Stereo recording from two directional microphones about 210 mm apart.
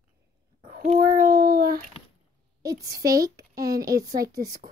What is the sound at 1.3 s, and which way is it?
Speech, 45° right (ahead or behind).